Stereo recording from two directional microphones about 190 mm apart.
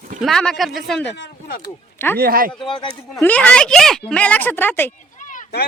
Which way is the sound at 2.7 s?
25° left (ahead or behind).